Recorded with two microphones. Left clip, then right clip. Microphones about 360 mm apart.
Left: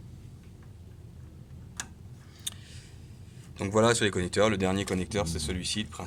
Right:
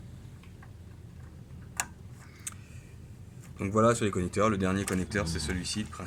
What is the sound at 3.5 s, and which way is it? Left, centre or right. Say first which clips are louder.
Speech: left 1 dB; left.